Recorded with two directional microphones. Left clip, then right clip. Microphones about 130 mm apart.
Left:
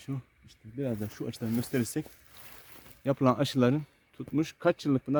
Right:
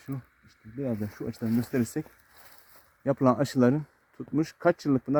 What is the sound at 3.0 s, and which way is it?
Speech, centre (ahead or behind).